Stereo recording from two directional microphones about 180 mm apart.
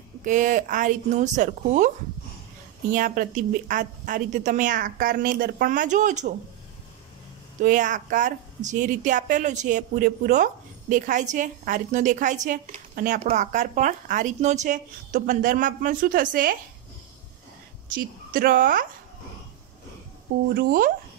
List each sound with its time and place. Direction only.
0.2 s a woman's voice: 45° right (ahead or behind)
2.9 s a woman's voice: 45° right (ahead or behind)
7.6 s a woman's voice: 45° right (ahead or behind)
17.9 s a woman's voice: 50° right (ahead or behind)
20.5 s a woman's voice: 50° right (ahead or behind)